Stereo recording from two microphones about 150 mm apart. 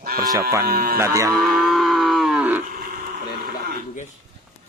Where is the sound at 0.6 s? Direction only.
80° right.